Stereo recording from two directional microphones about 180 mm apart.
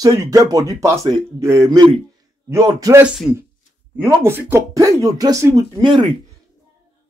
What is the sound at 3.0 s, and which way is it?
Speech, centre (ahead or behind).